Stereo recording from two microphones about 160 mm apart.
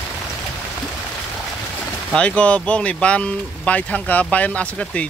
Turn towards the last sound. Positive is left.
turn(degrees=10)  # may be behind; listen again after turning